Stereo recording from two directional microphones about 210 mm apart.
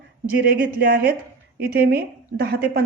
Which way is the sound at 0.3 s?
45° right (ahead or behind).